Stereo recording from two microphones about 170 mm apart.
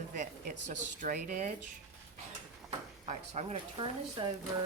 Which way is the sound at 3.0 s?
40° right (ahead or behind).